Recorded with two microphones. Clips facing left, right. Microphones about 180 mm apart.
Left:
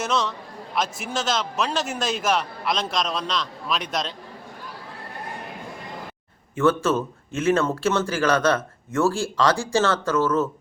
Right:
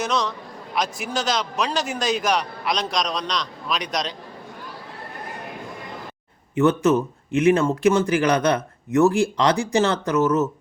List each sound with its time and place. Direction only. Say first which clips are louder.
0.0 s a man's voice: right 1 dB; centre (ahead or behind)
6.6 s speech: right 3 dB; 20° right (ahead or behind)